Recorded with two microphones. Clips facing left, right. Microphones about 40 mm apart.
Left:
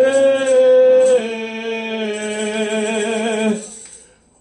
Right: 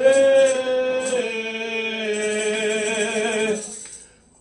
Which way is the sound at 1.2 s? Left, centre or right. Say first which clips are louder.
Left 2 dB; centre.